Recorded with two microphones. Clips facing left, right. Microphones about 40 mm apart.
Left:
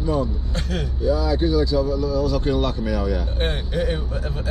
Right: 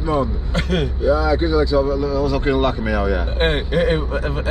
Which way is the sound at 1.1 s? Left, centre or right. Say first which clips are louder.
Right 2 dB; right.